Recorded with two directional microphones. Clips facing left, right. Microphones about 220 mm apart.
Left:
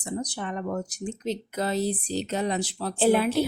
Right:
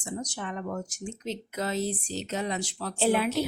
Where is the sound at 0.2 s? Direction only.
35° left (ahead or behind).